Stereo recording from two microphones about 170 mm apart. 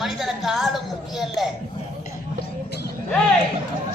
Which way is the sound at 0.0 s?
Centre (ahead or behind).